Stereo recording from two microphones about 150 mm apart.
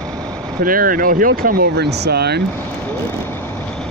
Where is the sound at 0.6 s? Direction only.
70° right (ahead or behind); by 2.4 s 90° right.